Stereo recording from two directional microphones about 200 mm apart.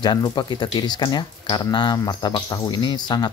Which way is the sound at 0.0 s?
20° left (ahead or behind).